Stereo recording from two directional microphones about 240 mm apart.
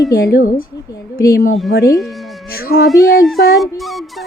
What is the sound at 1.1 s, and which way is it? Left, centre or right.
Speech, centre.